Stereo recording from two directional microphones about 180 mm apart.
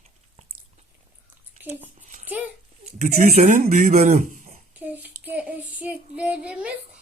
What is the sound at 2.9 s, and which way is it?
Speech, 40° right (ahead or behind).